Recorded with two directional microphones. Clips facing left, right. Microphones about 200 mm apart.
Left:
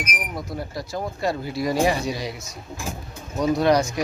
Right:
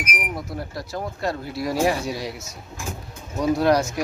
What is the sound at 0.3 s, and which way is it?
Speech, centre (ahead or behind).